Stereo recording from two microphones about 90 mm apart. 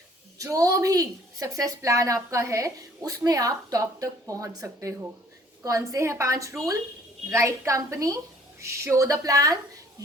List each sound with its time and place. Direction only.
0.3 s a woman's voice: 40° right (ahead or behind)